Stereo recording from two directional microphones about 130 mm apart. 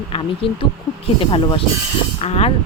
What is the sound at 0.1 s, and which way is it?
Speech, 40° left (ahead or behind).